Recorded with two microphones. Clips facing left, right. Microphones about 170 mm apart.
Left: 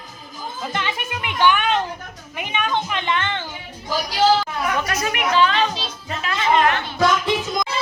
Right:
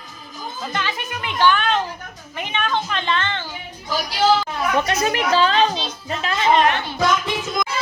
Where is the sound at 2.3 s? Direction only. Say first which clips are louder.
Even; 10° left (ahead or behind).